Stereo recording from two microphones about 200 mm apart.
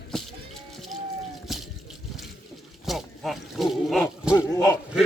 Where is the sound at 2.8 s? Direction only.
Centre (ahead or behind).